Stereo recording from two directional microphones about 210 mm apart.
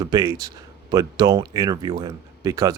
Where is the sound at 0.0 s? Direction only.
15° right (ahead or behind).